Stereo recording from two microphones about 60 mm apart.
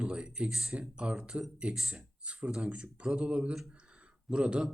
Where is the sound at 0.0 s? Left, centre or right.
Centre.